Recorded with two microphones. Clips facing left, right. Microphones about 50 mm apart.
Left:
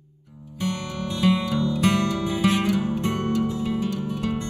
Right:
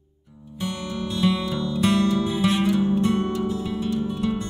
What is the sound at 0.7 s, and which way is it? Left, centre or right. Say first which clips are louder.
Music: right 1 dB; left.